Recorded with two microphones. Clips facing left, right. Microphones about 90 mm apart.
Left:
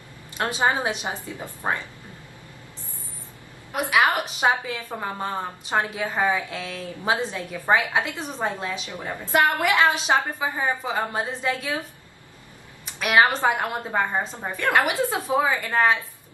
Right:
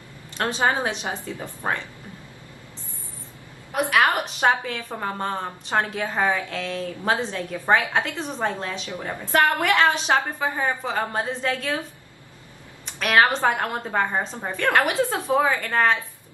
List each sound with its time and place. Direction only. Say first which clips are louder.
0.4 s a woman's voice: even; 15° left (ahead or behind)
4.4 s a woman's voice: right 1 dB; 10° left (ahead or behind)
13.0 s a woman's voice: even; 10° left (ahead or behind)